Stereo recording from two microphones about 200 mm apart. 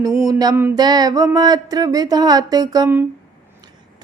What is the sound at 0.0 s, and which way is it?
A woman's voice, 15° right (ahead or behind).